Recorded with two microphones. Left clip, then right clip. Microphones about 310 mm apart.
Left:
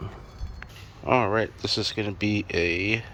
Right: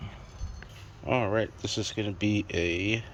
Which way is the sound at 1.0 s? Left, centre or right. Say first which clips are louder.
Left 5 dB; centre.